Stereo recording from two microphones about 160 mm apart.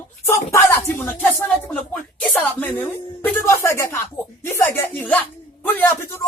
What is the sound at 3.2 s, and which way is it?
Speech, 15° left (ahead or behind).